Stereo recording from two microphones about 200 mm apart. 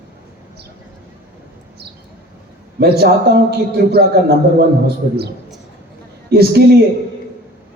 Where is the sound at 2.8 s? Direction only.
55° right (ahead or behind).